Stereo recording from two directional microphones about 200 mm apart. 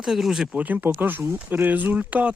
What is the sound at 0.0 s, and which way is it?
Speech, centre (ahead or behind).